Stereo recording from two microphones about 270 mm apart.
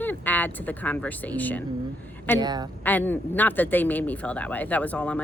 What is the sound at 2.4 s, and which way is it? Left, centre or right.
Speech, centre.